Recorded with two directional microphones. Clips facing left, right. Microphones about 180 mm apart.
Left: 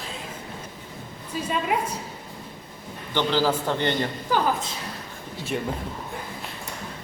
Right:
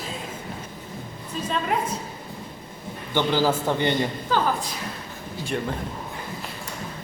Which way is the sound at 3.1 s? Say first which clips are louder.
Right 1 dB; 10° right (ahead or behind).